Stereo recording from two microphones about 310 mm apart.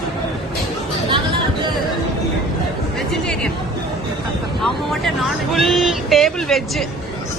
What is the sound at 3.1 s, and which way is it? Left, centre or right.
Music, centre.